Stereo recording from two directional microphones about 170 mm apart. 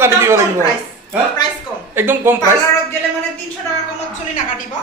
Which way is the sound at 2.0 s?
15° right (ahead or behind).